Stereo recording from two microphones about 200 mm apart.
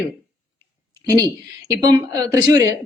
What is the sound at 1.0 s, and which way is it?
A woman's voice, 15° right (ahead or behind).